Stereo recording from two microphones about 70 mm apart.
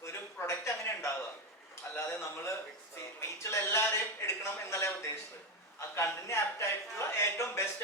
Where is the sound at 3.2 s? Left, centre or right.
Left.